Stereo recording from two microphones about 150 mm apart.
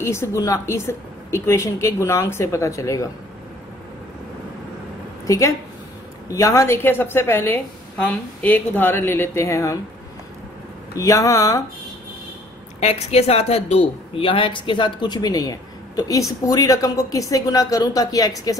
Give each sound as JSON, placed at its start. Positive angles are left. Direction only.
{"t": 0.0, "sound": "a woman's voice", "side_deg": 20}
{"t": 5.2, "sound": "a woman's voice", "side_deg": 20}
{"t": 11.0, "sound": "a woman's voice", "side_deg": 20}
{"t": 12.8, "sound": "a woman's voice", "side_deg": 45}